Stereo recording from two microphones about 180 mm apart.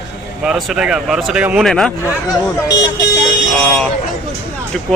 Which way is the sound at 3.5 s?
10° left (ahead or behind).